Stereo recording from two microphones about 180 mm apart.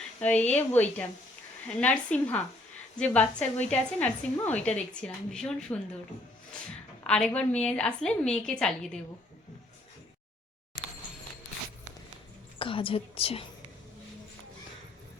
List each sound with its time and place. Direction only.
0.2 s a woman's voice: 5° left (ahead or behind)
7.1 s a woman's voice: 5° left (ahead or behind)
12.5 s a woman's voice: 30° left (ahead or behind)